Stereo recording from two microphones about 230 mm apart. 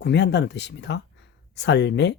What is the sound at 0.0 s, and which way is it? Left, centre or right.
Speech, left.